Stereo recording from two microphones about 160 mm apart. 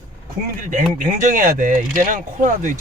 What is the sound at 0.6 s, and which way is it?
Speech, 55° right (ahead or behind).